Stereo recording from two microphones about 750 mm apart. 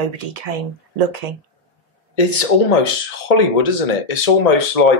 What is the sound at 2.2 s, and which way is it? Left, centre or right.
Speech, left.